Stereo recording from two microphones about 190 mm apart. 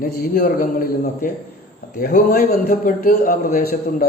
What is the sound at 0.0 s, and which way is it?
A man's voice, 50° left (ahead or behind).